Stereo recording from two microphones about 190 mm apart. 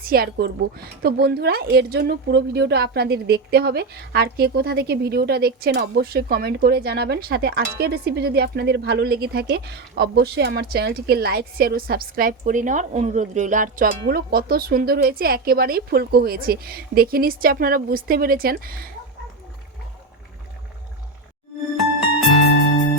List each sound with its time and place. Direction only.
0.0 s a woman's voice: 50° right (ahead or behind)